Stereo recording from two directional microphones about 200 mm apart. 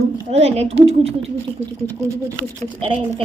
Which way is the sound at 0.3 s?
30° right (ahead or behind).